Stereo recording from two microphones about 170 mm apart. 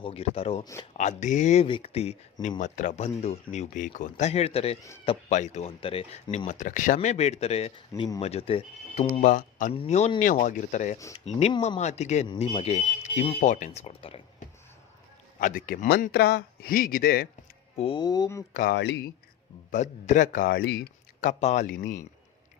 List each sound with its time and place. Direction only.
0.0 s speech: 35° left (ahead or behind)
0.6 s speech: 20° left (ahead or behind)
0.9 s speech: 45° left (ahead or behind)
1.6 s speech: 35° left (ahead or behind)
6.5 s speech: 50° left (ahead or behind)
9.2 s speech: 50° left (ahead or behind); by 14.4 s 35° left (ahead or behind)
15.4 s speech: 55° left (ahead or behind)
17.7 s speech: 30° left (ahead or behind)
18.7 s speech: 85° left
19.7 s speech: 45° left (ahead or behind)